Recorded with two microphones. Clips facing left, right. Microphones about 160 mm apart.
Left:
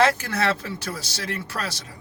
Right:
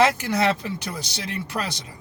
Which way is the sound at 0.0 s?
20° right (ahead or behind).